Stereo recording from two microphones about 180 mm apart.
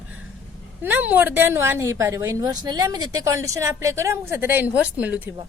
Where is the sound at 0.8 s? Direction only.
10° right (ahead or behind).